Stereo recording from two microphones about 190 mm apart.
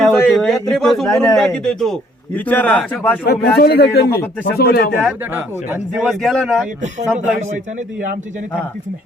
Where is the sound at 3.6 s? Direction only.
55° left (ahead or behind).